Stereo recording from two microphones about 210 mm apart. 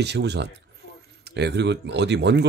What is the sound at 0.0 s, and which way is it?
Speech, 55° right (ahead or behind).